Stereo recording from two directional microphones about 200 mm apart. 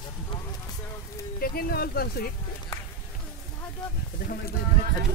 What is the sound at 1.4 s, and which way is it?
Speech, 50° left (ahead or behind).